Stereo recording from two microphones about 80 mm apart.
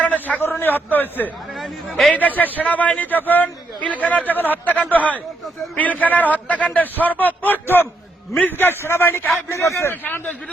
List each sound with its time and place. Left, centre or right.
0.0 s a sound: centre
1.5 s speech: centre
2.1 s a man's voice: left